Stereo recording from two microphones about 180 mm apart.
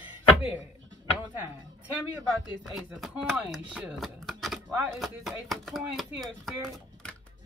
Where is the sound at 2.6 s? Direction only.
Centre (ahead or behind).